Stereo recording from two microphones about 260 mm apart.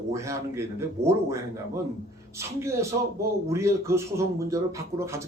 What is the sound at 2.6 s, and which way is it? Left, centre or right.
A man's voice, centre.